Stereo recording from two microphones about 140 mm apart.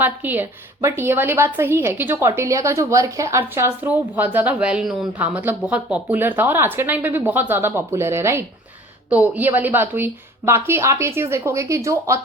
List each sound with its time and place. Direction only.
0.0 s a woman's voice: 15° right (ahead or behind)